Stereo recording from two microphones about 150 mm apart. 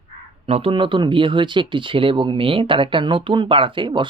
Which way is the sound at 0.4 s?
40° right (ahead or behind).